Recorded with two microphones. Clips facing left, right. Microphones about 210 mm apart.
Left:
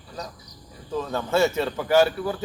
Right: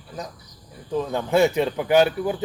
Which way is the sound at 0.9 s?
15° right (ahead or behind).